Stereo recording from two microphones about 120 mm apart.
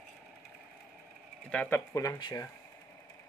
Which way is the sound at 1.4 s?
10° left (ahead or behind).